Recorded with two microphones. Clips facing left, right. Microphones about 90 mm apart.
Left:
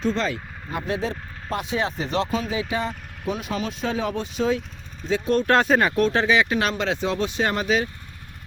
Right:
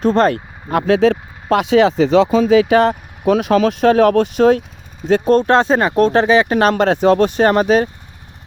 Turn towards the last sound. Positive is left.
turn(degrees=-50)  # may be behind; listen again after turning